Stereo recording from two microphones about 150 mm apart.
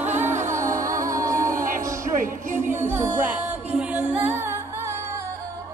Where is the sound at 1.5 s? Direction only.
60° right (ahead or behind).